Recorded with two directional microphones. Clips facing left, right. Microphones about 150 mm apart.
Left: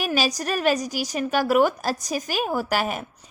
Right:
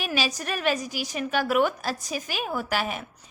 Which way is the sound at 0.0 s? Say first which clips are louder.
Left 4 dB; 40° left (ahead or behind).